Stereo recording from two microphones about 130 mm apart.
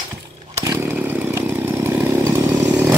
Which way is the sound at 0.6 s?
20° right (ahead or behind).